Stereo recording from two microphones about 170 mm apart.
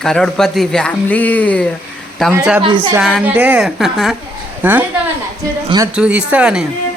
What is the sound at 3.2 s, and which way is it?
Speech, 10° right (ahead or behind).